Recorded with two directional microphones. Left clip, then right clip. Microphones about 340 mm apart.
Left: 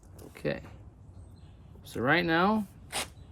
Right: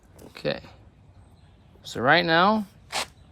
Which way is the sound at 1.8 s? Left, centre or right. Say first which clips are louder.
Right 7 dB; centre.